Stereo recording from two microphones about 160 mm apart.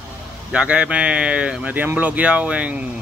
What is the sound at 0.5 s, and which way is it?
Speech, 5° right (ahead or behind).